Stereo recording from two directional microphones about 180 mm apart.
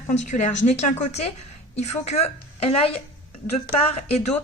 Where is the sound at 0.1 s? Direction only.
40° left (ahead or behind).